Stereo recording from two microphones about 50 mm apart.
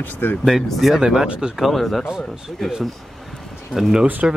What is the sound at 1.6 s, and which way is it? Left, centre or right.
Speech, centre.